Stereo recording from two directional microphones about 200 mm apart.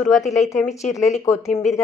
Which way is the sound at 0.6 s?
35° left (ahead or behind).